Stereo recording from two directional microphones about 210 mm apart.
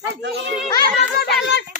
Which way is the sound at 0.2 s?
55° right (ahead or behind).